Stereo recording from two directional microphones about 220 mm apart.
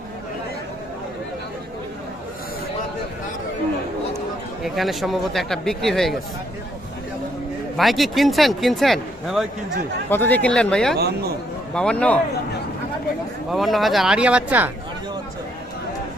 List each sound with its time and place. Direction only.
4.6 s speech: centre (ahead or behind)
7.8 s speech: centre (ahead or behind)
10.9 s a man's voice: 45° right (ahead or behind)
11.7 s speech: 5° left (ahead or behind)
13.5 s speech: centre (ahead or behind)